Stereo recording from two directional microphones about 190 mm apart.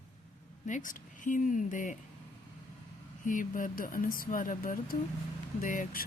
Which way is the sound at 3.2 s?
45° left (ahead or behind).